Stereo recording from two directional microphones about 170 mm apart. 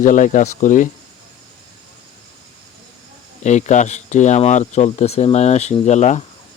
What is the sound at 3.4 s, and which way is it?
Speech, 45° left (ahead or behind).